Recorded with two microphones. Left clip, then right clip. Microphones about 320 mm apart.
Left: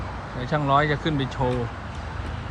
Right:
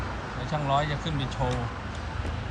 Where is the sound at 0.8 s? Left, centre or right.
Centre.